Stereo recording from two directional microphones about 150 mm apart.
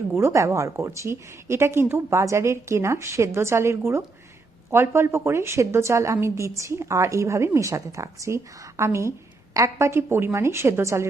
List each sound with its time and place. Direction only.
0.2 s a woman's voice: 20° right (ahead or behind)